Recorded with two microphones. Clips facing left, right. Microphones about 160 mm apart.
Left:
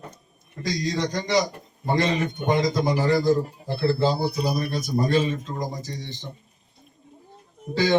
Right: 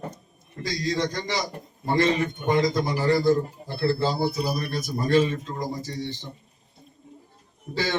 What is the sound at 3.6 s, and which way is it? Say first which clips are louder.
Speech: left 6 dB; 30° right (ahead or behind).